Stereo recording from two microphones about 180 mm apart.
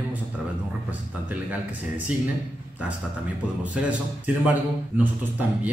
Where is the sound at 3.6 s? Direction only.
10° right (ahead or behind).